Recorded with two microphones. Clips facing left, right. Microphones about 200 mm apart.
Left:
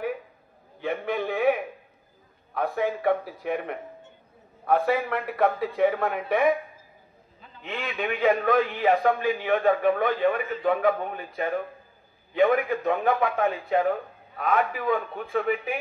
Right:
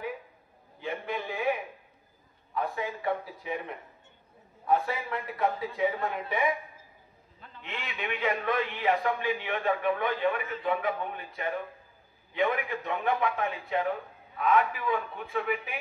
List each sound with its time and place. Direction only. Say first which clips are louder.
0.7 s a sound: left 6 dB; 65° left (ahead or behind)
2.5 s a man's voice: left 6 dB; 65° left (ahead or behind)
7.8 s a man's voice: left 8 dB; 45° left (ahead or behind)